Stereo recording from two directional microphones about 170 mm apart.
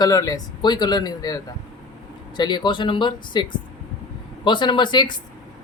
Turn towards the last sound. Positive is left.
turn(degrees=25)  # may be behind; listen again after turning